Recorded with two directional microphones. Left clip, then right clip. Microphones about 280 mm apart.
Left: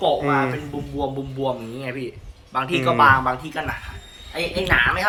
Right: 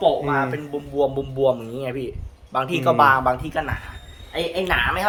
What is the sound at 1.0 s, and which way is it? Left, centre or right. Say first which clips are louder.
Speech: right 6 dB; right.